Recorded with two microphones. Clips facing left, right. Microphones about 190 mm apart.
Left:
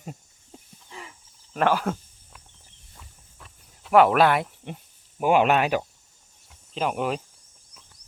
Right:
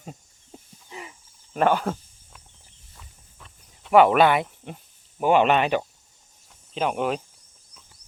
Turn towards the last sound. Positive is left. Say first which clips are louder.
# right 1 dB
turn(degrees=0)  # may be behind; listen again after turning